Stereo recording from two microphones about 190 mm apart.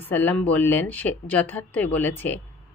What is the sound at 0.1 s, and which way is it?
Speech, 10° left (ahead or behind).